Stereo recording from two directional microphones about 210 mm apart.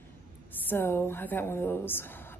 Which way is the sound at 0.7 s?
10° left (ahead or behind).